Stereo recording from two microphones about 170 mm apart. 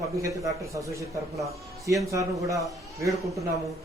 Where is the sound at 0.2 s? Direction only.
20° right (ahead or behind).